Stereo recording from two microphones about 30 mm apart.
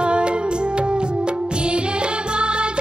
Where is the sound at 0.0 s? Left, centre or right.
Right.